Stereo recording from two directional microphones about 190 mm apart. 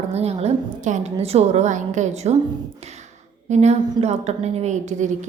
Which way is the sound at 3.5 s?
35° right (ahead or behind).